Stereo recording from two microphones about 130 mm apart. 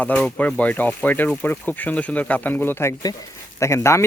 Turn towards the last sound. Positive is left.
turn(degrees=20)  # may be behind; listen again after turning